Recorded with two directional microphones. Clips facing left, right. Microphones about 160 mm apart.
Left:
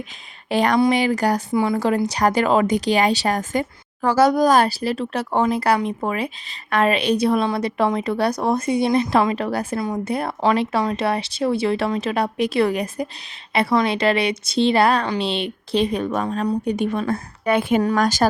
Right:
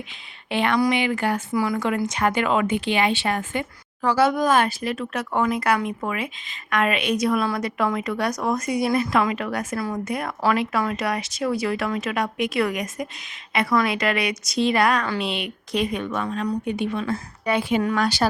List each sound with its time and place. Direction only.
0.5 s a woman's voice: 40° left (ahead or behind)
1.5 s a woman's voice: 30° left (ahead or behind); by 18.3 s 45° left (ahead or behind)